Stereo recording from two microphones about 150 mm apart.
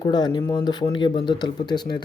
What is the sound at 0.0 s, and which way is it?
Speech, 30° left (ahead or behind).